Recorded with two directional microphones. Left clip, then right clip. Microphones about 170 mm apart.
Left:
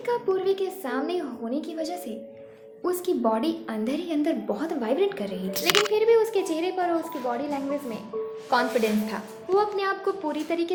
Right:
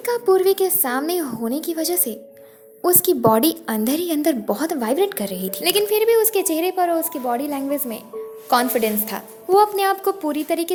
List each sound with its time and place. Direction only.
0.0 s a woman's voice: 65° right (ahead or behind)